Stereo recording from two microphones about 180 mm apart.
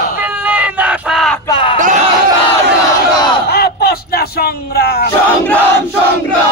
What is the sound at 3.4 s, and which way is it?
Speech, 60° left (ahead or behind).